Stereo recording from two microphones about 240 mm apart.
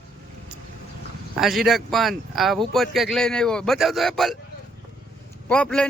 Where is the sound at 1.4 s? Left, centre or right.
Centre.